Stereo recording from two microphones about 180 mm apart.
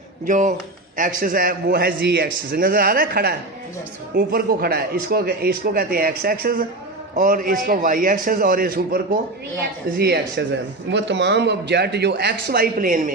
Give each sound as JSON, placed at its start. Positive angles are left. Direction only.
{"t": 0.3, "sound": "a man's voice", "side_deg": -45}
{"t": 10.0, "sound": "a man's voice", "side_deg": -65}
{"t": 10.8, "sound": "a man's voice", "side_deg": -75}